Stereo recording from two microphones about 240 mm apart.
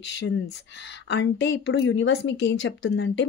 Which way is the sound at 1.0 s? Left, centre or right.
Left.